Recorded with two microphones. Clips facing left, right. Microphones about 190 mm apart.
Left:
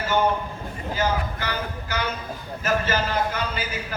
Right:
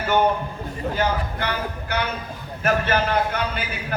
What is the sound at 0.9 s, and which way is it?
A man's voice, 60° right (ahead or behind).